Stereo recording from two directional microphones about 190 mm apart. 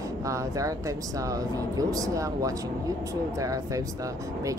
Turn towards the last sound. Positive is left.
turn(degrees=-15)  # may be behind; listen again after turning